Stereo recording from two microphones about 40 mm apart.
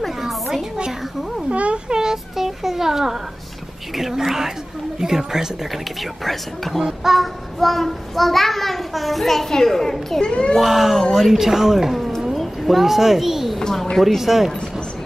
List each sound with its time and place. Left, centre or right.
0.2 s a sound: centre
1.5 s a sound: right
2.0 s a sound: centre
3.9 s a woman's voice: centre
6.2 s a child's voice: centre
6.8 s a woman's voice: centre
7.2 s a child's voice: centre
10.2 s a child's voice: left
10.6 s a woman's voice: centre
13.6 s a woman's voice: centre
14.0 s a child's voice: centre